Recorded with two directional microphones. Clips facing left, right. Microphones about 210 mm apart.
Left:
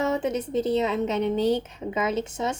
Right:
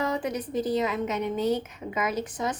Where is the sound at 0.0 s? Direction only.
25° left (ahead or behind).